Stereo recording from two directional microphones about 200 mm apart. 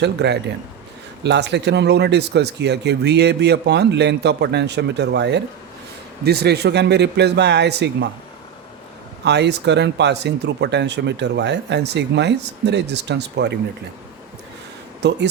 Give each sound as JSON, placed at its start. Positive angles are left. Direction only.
{"t": 0.0, "sound": "speech", "side_deg": -60}
{"t": 9.2, "sound": "speech", "side_deg": -60}
{"t": 15.0, "sound": "speech", "side_deg": -60}